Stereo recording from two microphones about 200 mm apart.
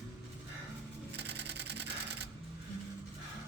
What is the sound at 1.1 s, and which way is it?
Typewriter, 55° right (ahead or behind).